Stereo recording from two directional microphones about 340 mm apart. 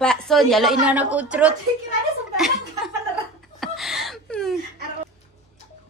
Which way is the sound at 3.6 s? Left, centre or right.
Centre.